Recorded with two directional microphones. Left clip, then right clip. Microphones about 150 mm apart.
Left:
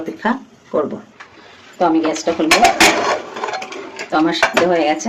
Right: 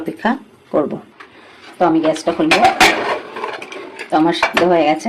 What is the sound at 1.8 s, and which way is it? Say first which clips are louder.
Speech: right 1 dB; 20° right (ahead or behind).